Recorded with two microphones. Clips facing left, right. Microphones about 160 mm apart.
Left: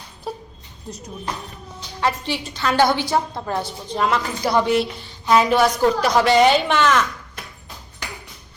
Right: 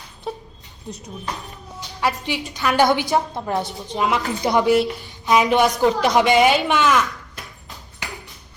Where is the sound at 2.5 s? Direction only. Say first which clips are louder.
Right 1 dB; 15° right (ahead or behind).